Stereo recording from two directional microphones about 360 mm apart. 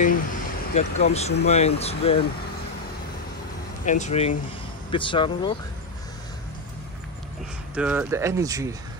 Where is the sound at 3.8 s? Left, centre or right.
Centre.